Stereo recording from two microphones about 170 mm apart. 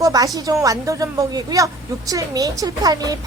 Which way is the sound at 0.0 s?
20° right (ahead or behind).